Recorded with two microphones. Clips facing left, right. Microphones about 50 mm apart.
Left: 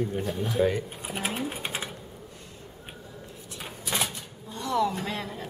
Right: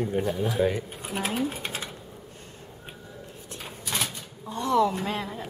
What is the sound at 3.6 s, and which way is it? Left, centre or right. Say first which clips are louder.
Shuffling cards: left 1 dB; centre.